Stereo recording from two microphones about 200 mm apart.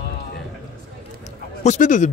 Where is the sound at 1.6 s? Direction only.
40° left (ahead or behind).